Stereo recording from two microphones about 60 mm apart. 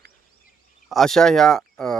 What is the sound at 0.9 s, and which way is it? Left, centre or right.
Speech, centre.